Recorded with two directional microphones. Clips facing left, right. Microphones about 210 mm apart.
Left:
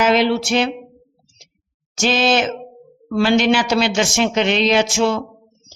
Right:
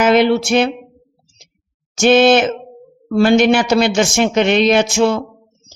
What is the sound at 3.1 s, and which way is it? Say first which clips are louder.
A man's voice: right 4 dB; 45° right (ahead or behind).